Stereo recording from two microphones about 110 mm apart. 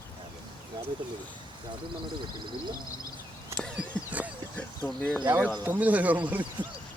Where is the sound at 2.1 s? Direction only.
45° right (ahead or behind).